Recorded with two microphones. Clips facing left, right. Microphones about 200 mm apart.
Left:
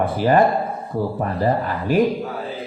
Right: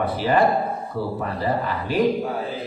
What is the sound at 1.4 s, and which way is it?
Speech, 50° left (ahead or behind).